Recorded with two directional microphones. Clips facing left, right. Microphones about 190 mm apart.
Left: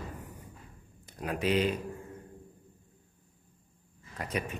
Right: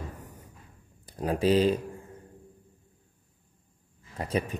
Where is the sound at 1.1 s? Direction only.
35° right (ahead or behind).